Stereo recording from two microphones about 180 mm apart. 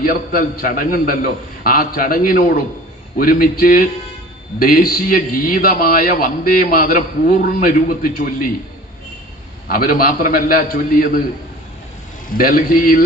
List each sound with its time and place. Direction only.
0.0 s a man's voice: 50° left (ahead or behind)
9.6 s a man's voice: 50° left (ahead or behind)
12.3 s a man's voice: 50° left (ahead or behind)